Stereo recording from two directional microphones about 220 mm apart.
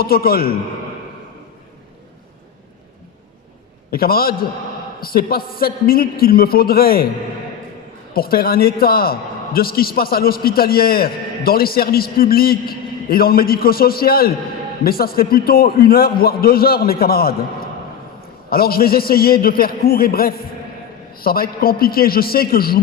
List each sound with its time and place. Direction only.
0.0 s a man's voice: 45° left (ahead or behind)
3.9 s a man's voice: 45° left (ahead or behind)
8.1 s a man's voice: 45° left (ahead or behind)
18.5 s a man's voice: 45° left (ahead or behind)